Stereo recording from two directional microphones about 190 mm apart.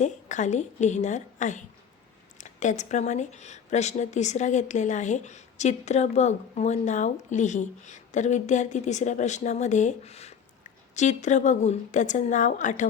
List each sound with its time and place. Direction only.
0.0 s speech: 40° left (ahead or behind)